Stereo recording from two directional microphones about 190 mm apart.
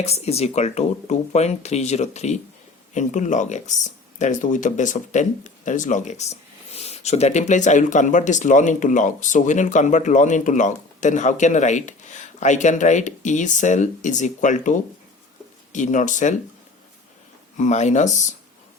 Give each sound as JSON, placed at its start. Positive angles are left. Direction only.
{"t": 0.0, "sound": "speech", "side_deg": 35}
{"t": 17.6, "sound": "speech", "side_deg": 40}